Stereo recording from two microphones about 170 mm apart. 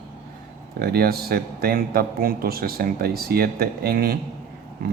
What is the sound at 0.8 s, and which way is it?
Speech, 65° right (ahead or behind).